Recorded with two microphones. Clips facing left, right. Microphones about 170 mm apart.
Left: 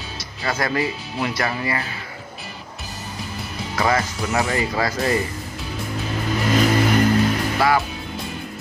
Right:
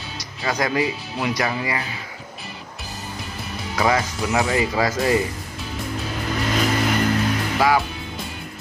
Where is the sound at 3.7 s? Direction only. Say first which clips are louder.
Right 1 dB; 10° right (ahead or behind).